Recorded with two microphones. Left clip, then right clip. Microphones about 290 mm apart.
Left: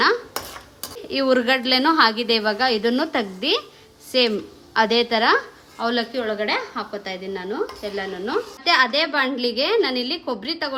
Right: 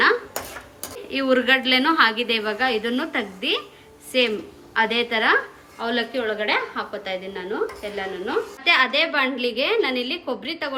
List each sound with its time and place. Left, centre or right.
1.1 s a woman's voice: left